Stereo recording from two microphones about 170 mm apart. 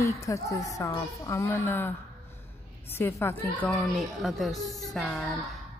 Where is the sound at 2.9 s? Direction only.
15° left (ahead or behind).